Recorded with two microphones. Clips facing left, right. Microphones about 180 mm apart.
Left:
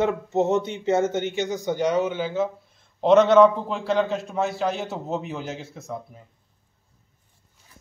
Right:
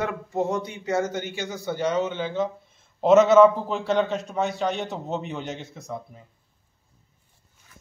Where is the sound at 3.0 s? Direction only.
5° right (ahead or behind).